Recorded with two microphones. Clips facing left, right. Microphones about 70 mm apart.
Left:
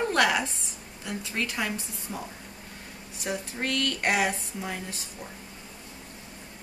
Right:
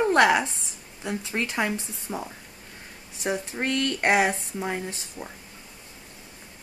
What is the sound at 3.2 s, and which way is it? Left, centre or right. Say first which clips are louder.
Speech: right 4 dB; right.